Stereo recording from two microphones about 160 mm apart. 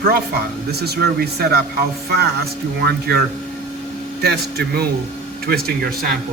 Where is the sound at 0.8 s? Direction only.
80° right.